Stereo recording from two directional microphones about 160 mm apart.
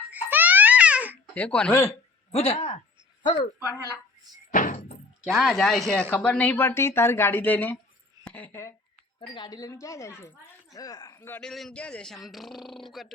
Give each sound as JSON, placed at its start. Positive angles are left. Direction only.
{"t": 0.1, "sound": "baby cry", "side_deg": -10}
{"t": 1.3, "sound": "speech", "side_deg": 5}
{"t": 2.3, "sound": "speech", "side_deg": 40}
{"t": 3.7, "sound": "speech", "side_deg": 20}
{"t": 4.5, "sound": "door", "side_deg": 55}
{"t": 5.2, "sound": "a man's voice", "side_deg": 0}
{"t": 9.2, "sound": "speech", "side_deg": 30}
{"t": 11.3, "sound": "a man's voice", "side_deg": 5}